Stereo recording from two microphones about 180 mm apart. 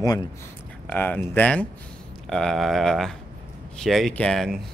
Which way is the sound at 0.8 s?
10° left (ahead or behind).